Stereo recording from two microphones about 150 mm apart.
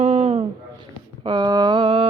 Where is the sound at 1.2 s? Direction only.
30° right (ahead or behind).